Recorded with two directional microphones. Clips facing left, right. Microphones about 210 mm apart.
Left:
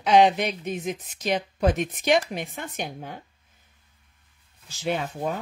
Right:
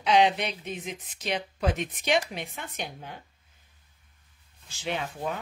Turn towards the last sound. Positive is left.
turn(degrees=45)  # may be behind; listen again after turning